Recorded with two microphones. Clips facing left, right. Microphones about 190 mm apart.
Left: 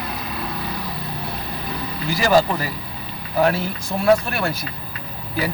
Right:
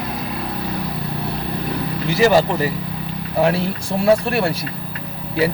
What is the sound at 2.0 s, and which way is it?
Speech, 25° right (ahead or behind).